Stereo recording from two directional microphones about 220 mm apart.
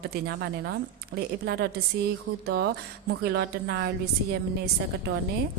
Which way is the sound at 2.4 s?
45° right (ahead or behind).